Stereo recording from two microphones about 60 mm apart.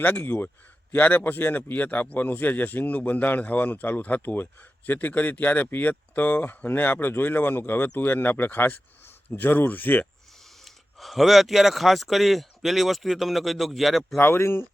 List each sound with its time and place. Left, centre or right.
0.0 s speech: left
11.0 s a man's voice: centre
14.2 s speech: left